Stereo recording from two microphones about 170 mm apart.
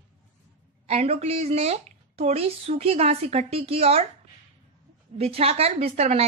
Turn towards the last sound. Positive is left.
turn(degrees=-40)  # may be behind; listen again after turning